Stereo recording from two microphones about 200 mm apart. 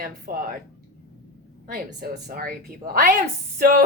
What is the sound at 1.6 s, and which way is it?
A woman's voice, 50° right (ahead or behind).